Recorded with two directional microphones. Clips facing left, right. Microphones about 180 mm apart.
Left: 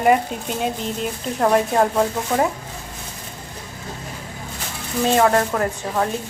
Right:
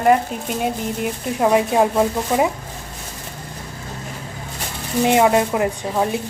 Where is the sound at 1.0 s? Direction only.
10° right (ahead or behind).